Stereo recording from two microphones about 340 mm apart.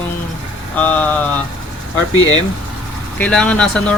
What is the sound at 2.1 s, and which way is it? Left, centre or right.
Speech, left.